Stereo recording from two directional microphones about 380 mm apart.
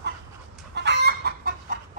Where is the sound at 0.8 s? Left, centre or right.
Right.